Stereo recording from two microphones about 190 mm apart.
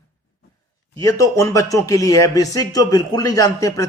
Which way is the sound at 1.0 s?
15° left (ahead or behind).